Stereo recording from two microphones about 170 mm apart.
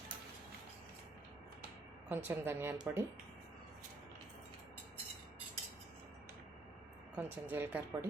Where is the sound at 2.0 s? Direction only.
15° right (ahead or behind).